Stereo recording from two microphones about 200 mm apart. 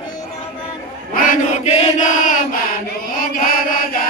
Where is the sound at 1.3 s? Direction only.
35° left (ahead or behind).